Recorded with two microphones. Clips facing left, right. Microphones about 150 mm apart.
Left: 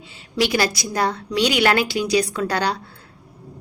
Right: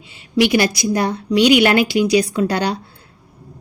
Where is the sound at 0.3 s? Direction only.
15° right (ahead or behind).